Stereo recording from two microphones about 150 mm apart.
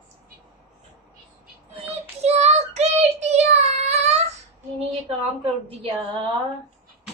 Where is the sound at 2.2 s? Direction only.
45° right (ahead or behind).